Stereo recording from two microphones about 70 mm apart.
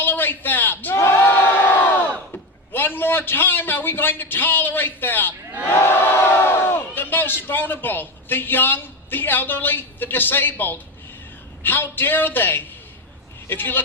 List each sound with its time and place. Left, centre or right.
0.0 s a sound: left
1.5 s crowd: left
2.7 s a man's voice: left
5.7 s crowd: left
6.9 s a man's voice: left